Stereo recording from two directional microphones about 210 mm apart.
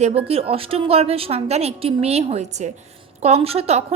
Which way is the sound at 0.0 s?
30° right (ahead or behind).